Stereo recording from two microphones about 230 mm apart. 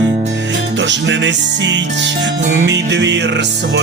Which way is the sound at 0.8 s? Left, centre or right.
Right.